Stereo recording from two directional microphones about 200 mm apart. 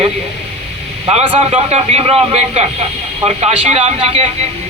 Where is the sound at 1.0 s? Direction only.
25° right (ahead or behind).